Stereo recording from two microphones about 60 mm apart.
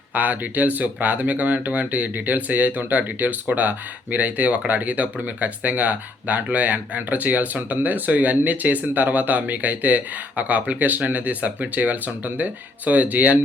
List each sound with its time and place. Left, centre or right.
0.1 s speech: right